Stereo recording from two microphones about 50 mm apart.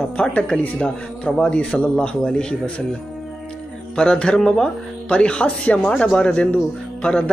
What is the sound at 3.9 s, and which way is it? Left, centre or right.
Mantra, centre.